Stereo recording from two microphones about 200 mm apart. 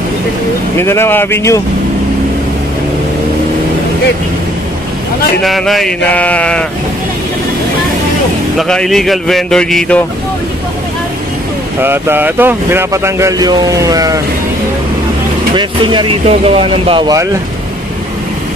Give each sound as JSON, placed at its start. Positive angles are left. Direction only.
{"t": 0.7, "sound": "speech", "side_deg": 10}
{"t": 5.4, "sound": "speech", "side_deg": 0}
{"t": 8.5, "sound": "speech", "side_deg": 0}
{"t": 11.8, "sound": "speech", "side_deg": -10}
{"t": 15.5, "sound": "speech", "side_deg": -25}